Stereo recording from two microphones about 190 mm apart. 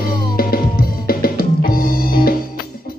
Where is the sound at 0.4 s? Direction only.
50° left (ahead or behind).